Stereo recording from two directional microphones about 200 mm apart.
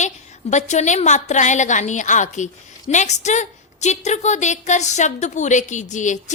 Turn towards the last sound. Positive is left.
turn(degrees=35)  # may be behind; listen again after turning